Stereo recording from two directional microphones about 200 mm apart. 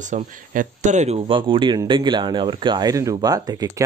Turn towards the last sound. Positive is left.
turn(degrees=-20)  # may be behind; listen again after turning